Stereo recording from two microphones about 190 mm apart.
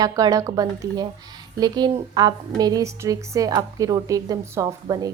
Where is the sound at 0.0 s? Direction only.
20° right (ahead or behind).